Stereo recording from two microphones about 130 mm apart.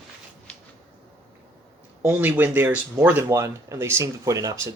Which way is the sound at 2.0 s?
15° right (ahead or behind).